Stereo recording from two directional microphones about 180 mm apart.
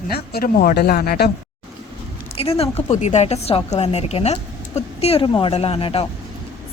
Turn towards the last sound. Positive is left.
turn(degrees=30)  # may be behind; listen again after turning